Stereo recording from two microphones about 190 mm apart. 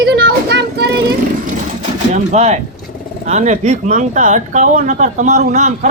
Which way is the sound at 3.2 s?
40° right (ahead or behind).